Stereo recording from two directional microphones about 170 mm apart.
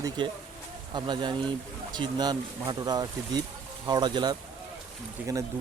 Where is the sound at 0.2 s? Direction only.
25° right (ahead or behind).